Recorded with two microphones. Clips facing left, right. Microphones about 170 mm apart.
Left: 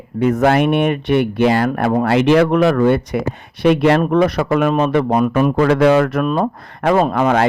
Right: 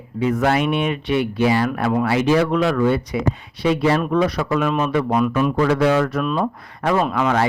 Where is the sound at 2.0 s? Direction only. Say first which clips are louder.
Left 6 dB; 65° left (ahead or behind).